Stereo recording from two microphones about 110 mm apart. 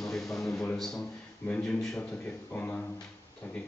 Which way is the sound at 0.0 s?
5° left (ahead or behind).